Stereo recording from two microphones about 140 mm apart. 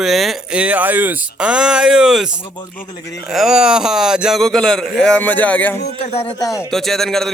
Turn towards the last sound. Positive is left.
turn(degrees=5)  # may be behind; listen again after turning